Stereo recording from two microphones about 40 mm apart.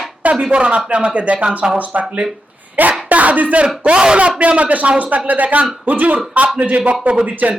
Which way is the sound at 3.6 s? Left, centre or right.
Right.